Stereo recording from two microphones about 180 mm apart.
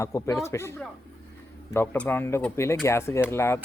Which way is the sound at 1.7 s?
10° left (ahead or behind).